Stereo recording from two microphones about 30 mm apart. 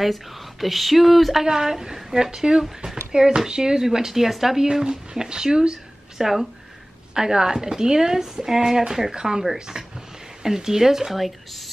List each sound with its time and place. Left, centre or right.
0.0 s speech: centre
1.4 s a woman's voice: centre
5.1 s speech: right
6.1 s speech: centre
10.4 s a woman's voice: centre